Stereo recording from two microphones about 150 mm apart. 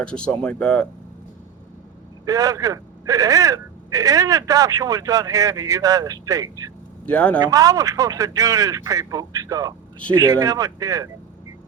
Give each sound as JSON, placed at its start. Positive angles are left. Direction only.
{"t": 0.0, "sound": "speech", "side_deg": 5}
{"t": 2.2, "sound": "speech", "side_deg": -25}
{"t": 7.0, "sound": "a man's voice", "side_deg": 10}
{"t": 7.3, "sound": "speech", "side_deg": -20}